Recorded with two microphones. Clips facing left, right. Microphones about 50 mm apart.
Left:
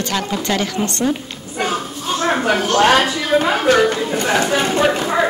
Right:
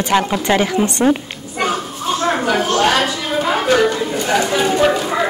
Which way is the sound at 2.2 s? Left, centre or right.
Left.